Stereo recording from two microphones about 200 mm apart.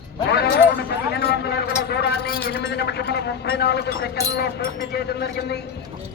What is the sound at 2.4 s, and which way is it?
A man's voice, 55° left (ahead or behind).